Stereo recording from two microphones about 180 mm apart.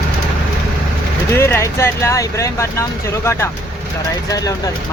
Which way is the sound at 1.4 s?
15° left (ahead or behind).